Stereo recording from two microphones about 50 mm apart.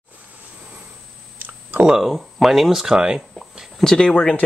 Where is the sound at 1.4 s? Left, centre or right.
Right.